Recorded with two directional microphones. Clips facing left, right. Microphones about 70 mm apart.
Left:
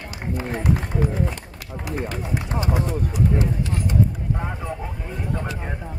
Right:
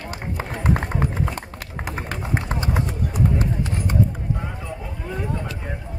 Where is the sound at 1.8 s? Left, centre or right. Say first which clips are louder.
Left 1 dB; right.